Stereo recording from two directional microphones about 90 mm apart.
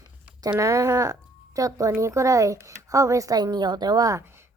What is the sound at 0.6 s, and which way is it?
Speech, 35° right (ahead or behind).